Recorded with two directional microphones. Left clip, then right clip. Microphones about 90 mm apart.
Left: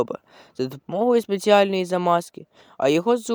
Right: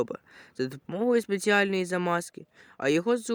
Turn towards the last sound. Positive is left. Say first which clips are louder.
# left 6 dB
turn(degrees=30)  # may be behind; listen again after turning